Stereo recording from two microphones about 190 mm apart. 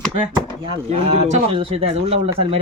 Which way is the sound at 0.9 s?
35° right (ahead or behind).